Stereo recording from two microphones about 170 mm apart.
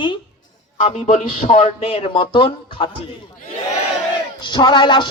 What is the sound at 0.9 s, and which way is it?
Speech, 45° left (ahead or behind).